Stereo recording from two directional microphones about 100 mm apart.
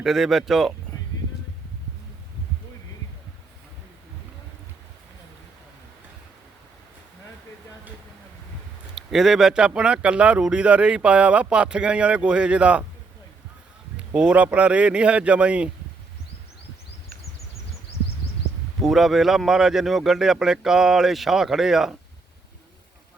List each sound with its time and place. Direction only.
0.0 s speech: centre (ahead or behind)
9.0 s speech: 5° right (ahead or behind)
13.9 s speech: 10° right (ahead or behind)
18.8 s speech: centre (ahead or behind)